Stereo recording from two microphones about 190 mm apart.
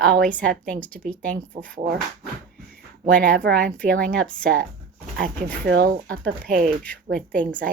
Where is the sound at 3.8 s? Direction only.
5° left (ahead or behind).